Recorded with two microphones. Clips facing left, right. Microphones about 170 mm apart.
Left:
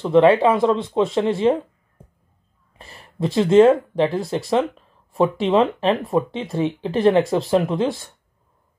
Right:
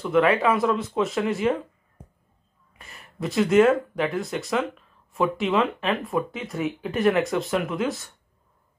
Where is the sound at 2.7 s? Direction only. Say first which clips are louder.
Left 5 dB; 30° left (ahead or behind).